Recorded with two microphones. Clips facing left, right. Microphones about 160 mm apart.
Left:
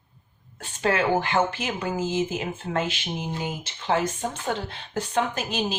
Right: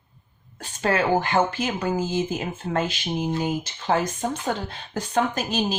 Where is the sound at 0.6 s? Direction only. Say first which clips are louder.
Right 1 dB; 40° right (ahead or behind).